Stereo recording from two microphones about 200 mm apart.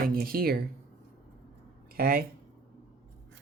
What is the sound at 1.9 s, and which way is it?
Speech, 50° right (ahead or behind).